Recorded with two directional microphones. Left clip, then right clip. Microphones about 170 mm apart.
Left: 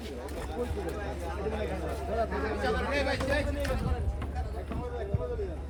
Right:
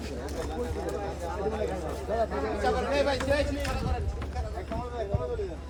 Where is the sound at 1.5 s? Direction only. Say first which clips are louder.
Right 2 dB; 60° right (ahead or behind).